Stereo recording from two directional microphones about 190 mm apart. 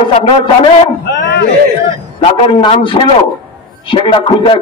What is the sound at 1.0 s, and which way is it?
Speech, 60° left (ahead or behind).